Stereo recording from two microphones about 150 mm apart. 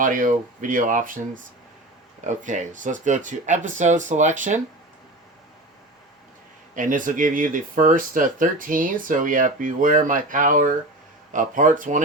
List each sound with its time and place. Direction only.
0.0 s speech: 65° right (ahead or behind)
6.7 s speech: 60° right (ahead or behind)